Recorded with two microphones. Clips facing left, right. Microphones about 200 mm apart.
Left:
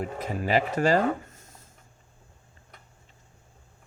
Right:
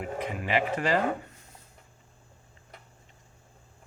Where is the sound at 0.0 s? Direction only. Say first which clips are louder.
Left 2 dB; 40° left (ahead or behind).